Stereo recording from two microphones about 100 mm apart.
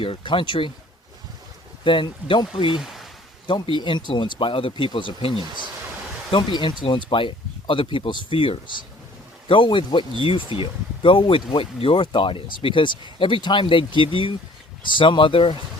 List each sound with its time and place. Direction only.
0.0 s speech: 60° left (ahead or behind)
1.8 s speech: 55° left (ahead or behind)
2.7 s a sound: 5° right (ahead or behind)
3.4 s speech: 50° left (ahead or behind)